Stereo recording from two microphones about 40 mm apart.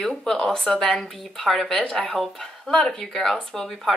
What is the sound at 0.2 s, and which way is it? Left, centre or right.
Speech, centre.